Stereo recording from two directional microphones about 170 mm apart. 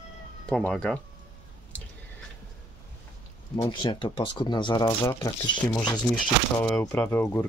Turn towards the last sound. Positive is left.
turn(degrees=15)  # may be behind; listen again after turning